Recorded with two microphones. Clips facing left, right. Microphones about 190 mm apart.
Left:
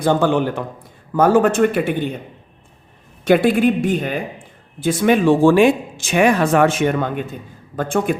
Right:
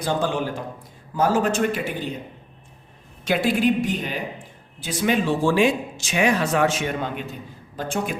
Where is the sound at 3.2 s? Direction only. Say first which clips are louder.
Left 6 dB; 55° left (ahead or behind).